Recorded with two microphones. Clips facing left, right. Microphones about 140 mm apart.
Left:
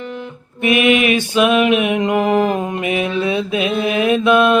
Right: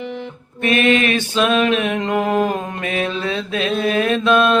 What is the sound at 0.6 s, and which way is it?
Mantra, 15° left (ahead or behind).